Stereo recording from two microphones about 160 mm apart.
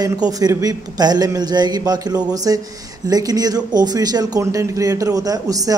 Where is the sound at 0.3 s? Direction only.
20° right (ahead or behind).